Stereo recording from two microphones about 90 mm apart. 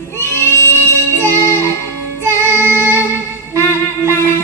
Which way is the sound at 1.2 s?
30° left (ahead or behind).